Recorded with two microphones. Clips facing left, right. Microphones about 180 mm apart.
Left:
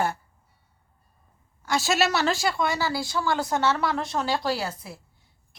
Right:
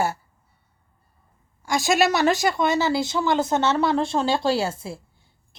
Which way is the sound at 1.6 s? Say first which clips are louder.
Right 4 dB; 15° right (ahead or behind).